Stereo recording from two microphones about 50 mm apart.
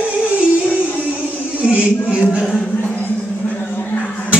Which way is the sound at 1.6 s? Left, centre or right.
Right.